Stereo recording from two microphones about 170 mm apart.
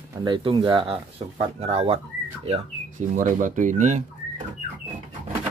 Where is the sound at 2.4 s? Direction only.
45° right (ahead or behind).